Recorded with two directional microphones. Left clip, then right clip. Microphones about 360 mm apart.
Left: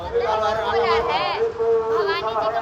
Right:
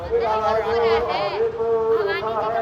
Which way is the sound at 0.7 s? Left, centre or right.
Left.